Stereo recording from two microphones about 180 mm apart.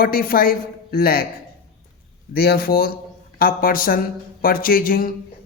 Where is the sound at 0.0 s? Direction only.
55° left (ahead or behind).